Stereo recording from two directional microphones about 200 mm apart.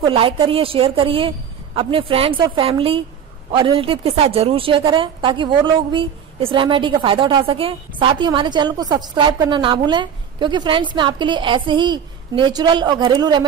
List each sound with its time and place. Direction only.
0.0 s a woman's voice: 25° right (ahead or behind)